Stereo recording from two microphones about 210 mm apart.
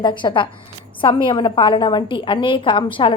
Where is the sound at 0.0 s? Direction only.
20° left (ahead or behind).